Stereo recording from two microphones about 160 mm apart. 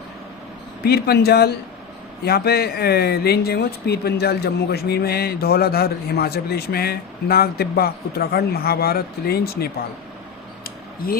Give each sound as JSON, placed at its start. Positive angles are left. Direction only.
{"t": 0.9, "sound": "speech", "side_deg": 80}